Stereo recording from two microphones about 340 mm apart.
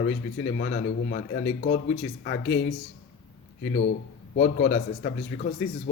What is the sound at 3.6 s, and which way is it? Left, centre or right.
Speech, left.